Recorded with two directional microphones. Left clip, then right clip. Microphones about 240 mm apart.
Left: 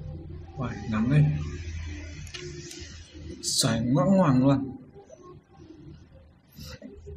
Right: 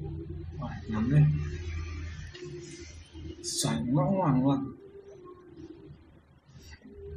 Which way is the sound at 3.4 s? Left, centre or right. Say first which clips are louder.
Left 6 dB; left.